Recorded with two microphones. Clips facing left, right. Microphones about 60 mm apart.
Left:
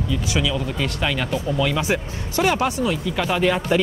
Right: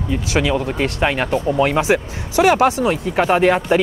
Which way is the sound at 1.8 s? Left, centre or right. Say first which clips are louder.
Right 6 dB; right.